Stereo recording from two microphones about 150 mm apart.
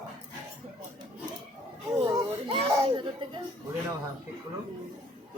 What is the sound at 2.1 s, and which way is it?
Children playing, 30° right (ahead or behind).